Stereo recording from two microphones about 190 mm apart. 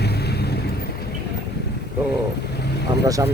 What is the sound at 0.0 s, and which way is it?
Boat, 60° left (ahead or behind).